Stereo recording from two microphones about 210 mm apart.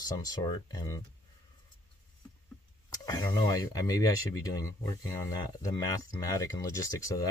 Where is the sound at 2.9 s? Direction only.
15° left (ahead or behind).